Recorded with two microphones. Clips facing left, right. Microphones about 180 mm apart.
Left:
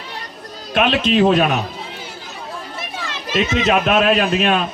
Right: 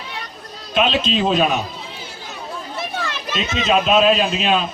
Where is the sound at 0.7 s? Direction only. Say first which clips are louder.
Left 2 dB; 60° left (ahead or behind).